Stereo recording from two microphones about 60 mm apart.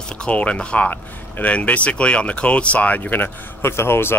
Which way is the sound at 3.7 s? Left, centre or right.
Left.